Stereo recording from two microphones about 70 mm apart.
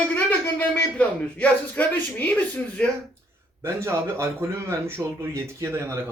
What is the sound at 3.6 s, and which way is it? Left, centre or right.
A man's voice, right.